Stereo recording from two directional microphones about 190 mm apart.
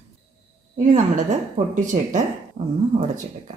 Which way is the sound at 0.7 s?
40° right (ahead or behind).